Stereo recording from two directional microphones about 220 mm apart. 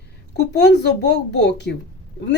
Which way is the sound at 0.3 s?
50° left (ahead or behind).